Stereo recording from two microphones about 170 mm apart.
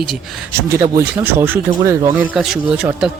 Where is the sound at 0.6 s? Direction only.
20° right (ahead or behind).